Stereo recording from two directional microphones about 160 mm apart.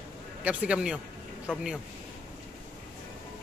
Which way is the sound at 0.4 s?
10° right (ahead or behind).